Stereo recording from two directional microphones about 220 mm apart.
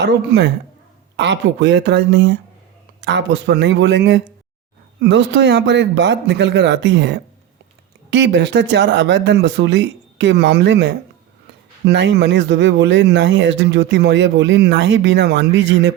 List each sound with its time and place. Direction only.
0.0 s speech: 50° right (ahead or behind)